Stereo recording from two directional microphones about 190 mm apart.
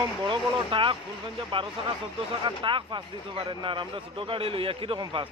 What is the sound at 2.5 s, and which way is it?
Speech, 25° right (ahead or behind).